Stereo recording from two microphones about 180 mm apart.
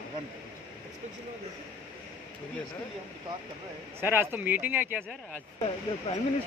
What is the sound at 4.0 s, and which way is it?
Speech, 10° right (ahead or behind).